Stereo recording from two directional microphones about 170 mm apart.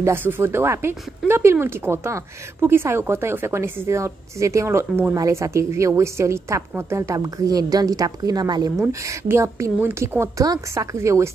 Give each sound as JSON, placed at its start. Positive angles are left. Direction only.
{"t": 0.0, "sound": "speech", "side_deg": -10}